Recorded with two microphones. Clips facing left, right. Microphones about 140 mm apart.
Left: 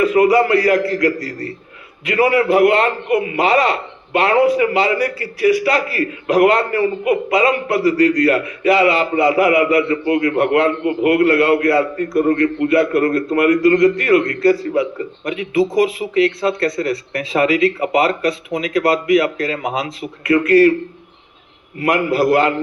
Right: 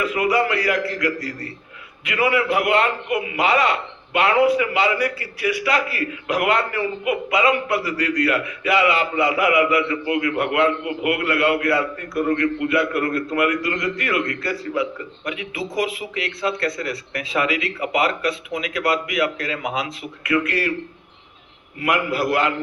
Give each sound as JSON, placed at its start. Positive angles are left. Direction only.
{"t": 0.0, "sound": "a man's voice", "side_deg": 40}
{"t": 21.8, "sound": "a man's voice", "side_deg": 40}